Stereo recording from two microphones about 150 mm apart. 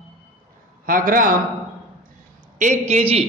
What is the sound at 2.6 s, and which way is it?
Speech, 50° right (ahead or behind).